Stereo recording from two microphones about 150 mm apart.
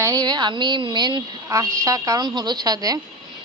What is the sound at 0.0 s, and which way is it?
A woman's voice, 25° right (ahead or behind).